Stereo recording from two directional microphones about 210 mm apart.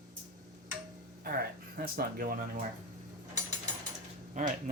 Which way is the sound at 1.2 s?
45° right (ahead or behind).